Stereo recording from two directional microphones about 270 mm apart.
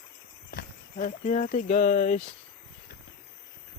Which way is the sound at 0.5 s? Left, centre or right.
Left.